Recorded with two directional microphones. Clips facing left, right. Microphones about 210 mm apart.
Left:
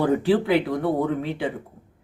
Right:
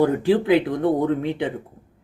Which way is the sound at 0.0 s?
20° right (ahead or behind).